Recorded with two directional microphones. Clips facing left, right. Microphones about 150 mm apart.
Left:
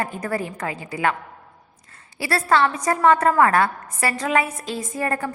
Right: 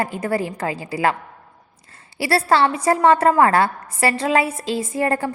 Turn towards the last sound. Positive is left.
turn(degrees=-30)  # may be behind; listen again after turning